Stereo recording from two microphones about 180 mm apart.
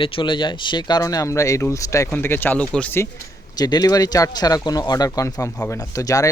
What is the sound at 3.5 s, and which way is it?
Speech, 20° left (ahead or behind).